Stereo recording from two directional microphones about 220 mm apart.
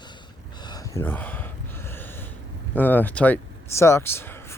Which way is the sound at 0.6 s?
15° left (ahead or behind).